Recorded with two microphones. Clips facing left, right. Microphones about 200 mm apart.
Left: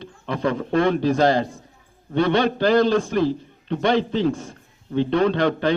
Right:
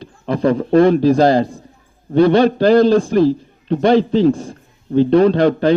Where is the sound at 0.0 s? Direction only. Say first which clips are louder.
Right 7 dB; 35° right (ahead or behind).